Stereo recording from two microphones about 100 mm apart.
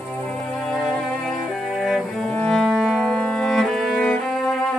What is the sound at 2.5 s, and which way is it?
Music, centre (ahead or behind).